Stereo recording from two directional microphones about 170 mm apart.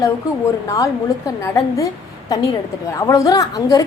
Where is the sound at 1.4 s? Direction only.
20° left (ahead or behind).